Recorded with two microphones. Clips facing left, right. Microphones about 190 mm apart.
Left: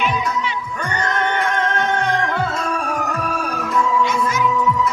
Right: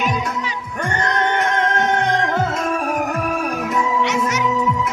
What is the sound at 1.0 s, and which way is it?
Music, 20° right (ahead or behind).